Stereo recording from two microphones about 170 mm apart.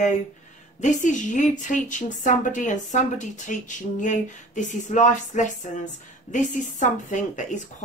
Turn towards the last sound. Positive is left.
turn(degrees=45)  # may be behind; listen again after turning